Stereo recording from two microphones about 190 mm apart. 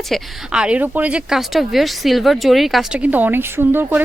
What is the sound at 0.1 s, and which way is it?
Speech, 5° right (ahead or behind).